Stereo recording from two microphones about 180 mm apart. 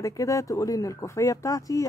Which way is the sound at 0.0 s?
20° left (ahead or behind).